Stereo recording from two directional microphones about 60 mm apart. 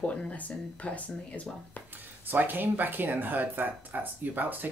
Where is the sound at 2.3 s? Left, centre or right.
Right.